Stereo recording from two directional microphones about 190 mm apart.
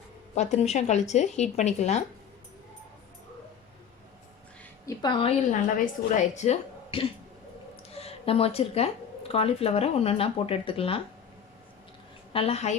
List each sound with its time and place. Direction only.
0.3 s a woman's voice: 35° left (ahead or behind)
4.9 s a woman's voice: 25° left (ahead or behind)
12.3 s a woman's voice: 30° left (ahead or behind)